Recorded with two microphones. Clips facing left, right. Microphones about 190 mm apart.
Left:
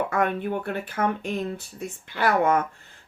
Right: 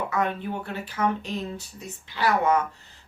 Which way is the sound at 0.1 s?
55° left (ahead or behind).